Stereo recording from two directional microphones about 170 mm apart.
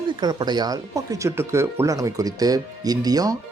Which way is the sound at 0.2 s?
25° right (ahead or behind).